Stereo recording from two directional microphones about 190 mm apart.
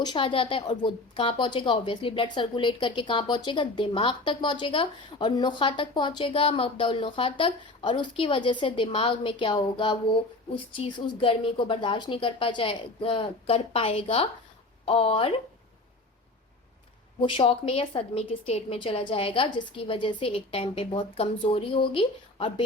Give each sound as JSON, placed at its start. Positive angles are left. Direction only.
{"t": 0.0, "sound": "a woman's voice", "side_deg": 25}
{"t": 17.2, "sound": "a woman's voice", "side_deg": 25}